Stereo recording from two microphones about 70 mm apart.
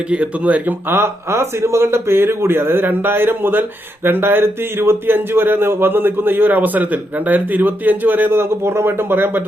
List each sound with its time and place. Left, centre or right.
0.1 s speech: centre